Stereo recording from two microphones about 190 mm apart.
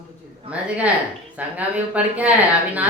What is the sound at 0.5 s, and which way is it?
Speech, 5° right (ahead or behind).